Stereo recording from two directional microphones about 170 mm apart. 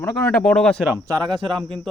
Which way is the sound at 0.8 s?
20° right (ahead or behind).